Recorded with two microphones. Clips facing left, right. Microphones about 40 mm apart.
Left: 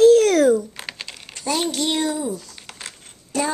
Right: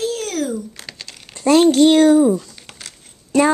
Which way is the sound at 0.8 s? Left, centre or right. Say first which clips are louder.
Left 2 dB; left.